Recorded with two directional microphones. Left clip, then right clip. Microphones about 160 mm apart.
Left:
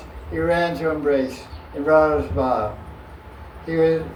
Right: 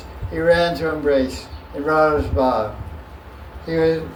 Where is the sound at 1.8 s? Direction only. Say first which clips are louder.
Even; 50° right (ahead or behind).